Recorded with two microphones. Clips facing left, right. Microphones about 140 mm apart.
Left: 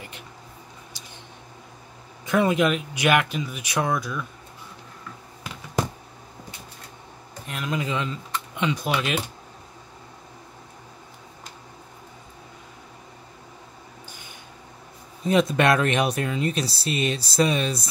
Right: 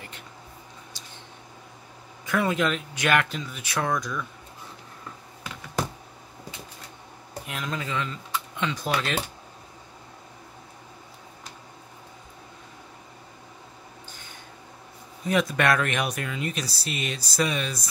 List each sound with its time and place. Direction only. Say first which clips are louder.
2.2 s speech: left 4 dB; 20° left (ahead or behind)
7.4 s speech: left 2 dB; centre (ahead or behind)
7.7 s speech: left 5 dB; 20° left (ahead or behind)
14.0 s a sound: left 2 dB; 10° left (ahead or behind)
15.2 s speech: left 4 dB; 25° left (ahead or behind)